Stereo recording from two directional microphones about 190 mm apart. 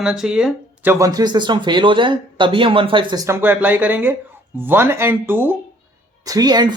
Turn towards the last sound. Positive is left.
turn(degrees=-20)  # may be behind; listen again after turning